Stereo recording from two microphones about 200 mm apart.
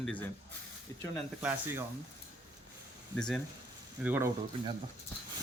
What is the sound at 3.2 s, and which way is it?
Speech, 5° left (ahead or behind).